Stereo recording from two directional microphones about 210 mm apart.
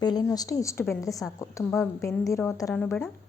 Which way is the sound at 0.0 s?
20° left (ahead or behind).